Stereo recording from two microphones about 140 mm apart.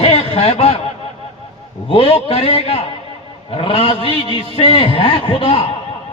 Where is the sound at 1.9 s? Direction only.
40° left (ahead or behind).